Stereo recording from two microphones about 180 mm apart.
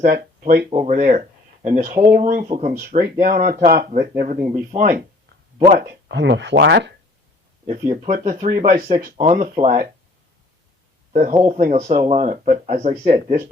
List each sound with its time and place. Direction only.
0.0 s speech: 50° right (ahead or behind)
0.7 s speech: 40° right (ahead or behind)
4.5 s speech: 45° right (ahead or behind)
6.1 s speech: 75° right (ahead or behind)
7.7 s speech: 40° right (ahead or behind)
11.1 s speech: 45° right (ahead or behind)